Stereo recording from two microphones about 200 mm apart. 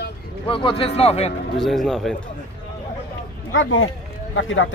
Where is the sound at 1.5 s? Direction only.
Centre (ahead or behind).